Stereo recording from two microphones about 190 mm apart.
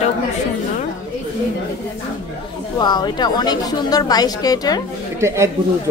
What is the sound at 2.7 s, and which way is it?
A woman's voice, 20° left (ahead or behind).